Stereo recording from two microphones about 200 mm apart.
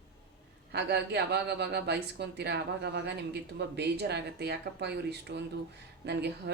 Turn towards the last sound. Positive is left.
turn(degrees=-55)  # may be behind; listen again after turning